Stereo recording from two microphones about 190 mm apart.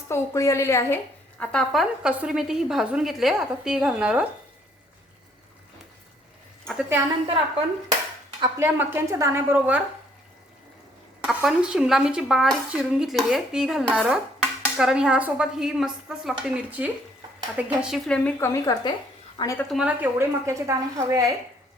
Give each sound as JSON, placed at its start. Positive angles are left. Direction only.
{"t": 0.1, "sound": "a woman's voice", "side_deg": 15}
{"t": 1.4, "sound": "speech", "side_deg": 0}
{"t": 8.4, "sound": "speech", "side_deg": -15}
{"t": 11.2, "sound": "a woman's voice", "side_deg": -5}
{"t": 19.7, "sound": "speech", "side_deg": -5}